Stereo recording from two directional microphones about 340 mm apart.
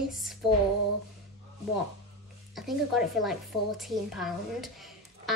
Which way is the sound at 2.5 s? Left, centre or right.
Centre.